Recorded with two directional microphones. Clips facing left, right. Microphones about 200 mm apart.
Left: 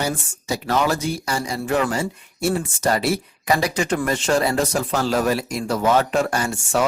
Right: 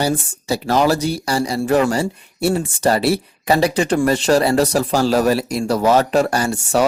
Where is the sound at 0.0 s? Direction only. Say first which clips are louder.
Right 5 dB; 30° right (ahead or behind).